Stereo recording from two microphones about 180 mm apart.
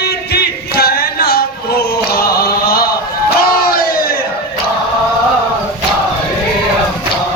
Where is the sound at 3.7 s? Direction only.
55° left (ahead or behind).